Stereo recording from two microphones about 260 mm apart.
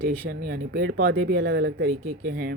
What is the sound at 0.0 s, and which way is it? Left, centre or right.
Speech, right.